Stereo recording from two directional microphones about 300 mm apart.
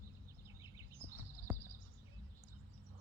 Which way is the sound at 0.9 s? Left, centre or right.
Centre.